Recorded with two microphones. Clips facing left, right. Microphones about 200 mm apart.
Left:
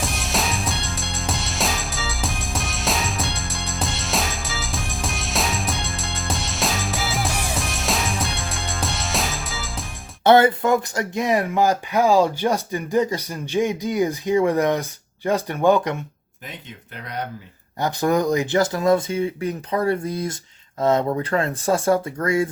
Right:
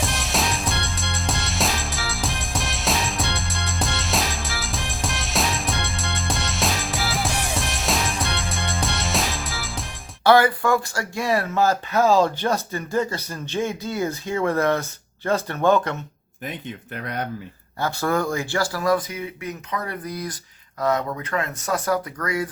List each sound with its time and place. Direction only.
0.0 s music: centre (ahead or behind)
10.2 s speech: 25° left (ahead or behind)
16.5 s speech: 55° right (ahead or behind)
17.7 s speech: 15° left (ahead or behind)